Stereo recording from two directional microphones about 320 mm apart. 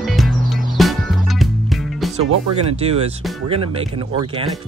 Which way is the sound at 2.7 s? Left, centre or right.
Centre.